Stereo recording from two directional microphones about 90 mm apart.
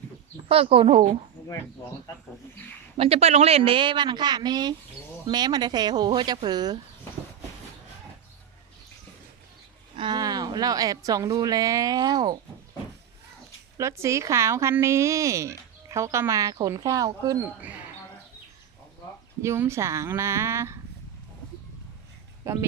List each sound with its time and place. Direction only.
0.4 s speech: 90° right
3.0 s a woman's voice: 90° right; by 6.7 s 50° right (ahead or behind)
10.2 s a woman's voice: 45° right (ahead or behind)
13.7 s speech: 30° right (ahead or behind)
17.6 s speech: 15° right (ahead or behind)
19.4 s a woman's voice: 30° right (ahead or behind)
22.5 s speech: 30° right (ahead or behind)